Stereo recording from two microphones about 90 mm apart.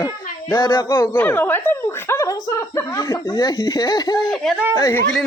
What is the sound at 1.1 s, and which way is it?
Speech, 20° left (ahead or behind).